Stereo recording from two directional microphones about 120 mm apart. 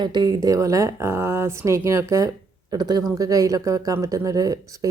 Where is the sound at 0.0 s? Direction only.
35° right (ahead or behind).